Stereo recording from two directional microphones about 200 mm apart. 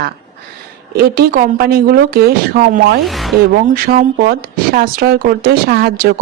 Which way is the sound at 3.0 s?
Centre (ahead or behind).